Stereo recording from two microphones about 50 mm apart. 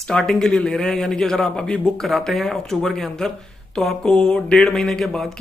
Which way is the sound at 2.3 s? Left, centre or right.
Centre.